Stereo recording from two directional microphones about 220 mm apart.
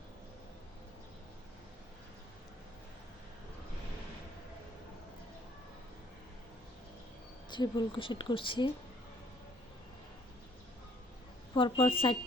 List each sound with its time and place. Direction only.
7.5 s a woman's voice: 20° left (ahead or behind)
11.5 s a woman's voice: 25° left (ahead or behind)